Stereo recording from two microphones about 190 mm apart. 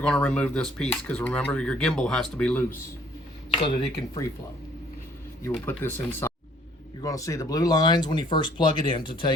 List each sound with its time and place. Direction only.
0.0 s speech: 5° left (ahead or behind)
3.6 s speech: 25° left (ahead or behind)
5.6 s speech: 10° left (ahead or behind)